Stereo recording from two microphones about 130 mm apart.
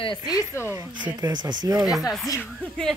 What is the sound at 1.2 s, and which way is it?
Speech, 35° right (ahead or behind).